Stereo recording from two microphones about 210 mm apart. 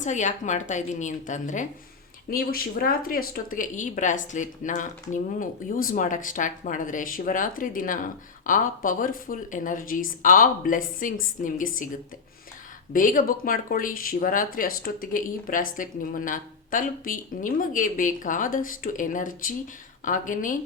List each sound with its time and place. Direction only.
0.0 s speech: 35° left (ahead or behind)
12.9 s speech: 40° left (ahead or behind)